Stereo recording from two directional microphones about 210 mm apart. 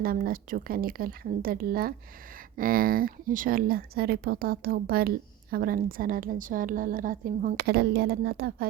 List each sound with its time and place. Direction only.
0.0 s speech: 45° right (ahead or behind)